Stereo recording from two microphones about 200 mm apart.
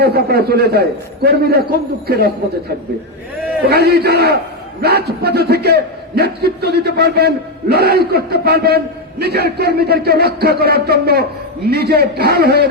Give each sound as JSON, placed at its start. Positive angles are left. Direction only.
{"t": 0.0, "sound": "a man's voice", "side_deg": -55}
{"t": 3.7, "sound": "a man's voice", "side_deg": -50}